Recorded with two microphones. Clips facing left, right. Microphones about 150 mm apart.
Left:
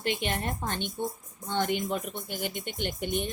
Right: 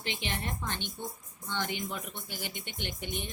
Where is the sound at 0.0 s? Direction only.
50° left (ahead or behind).